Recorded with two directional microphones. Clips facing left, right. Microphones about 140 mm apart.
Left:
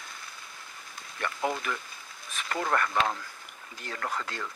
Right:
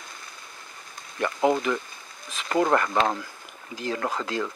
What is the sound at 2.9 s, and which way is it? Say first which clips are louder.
Speech: right 5 dB; 40° right (ahead or behind).